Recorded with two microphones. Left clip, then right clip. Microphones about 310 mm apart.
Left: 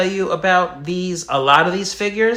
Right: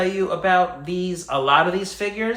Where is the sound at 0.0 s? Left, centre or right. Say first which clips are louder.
Left 3 dB; left.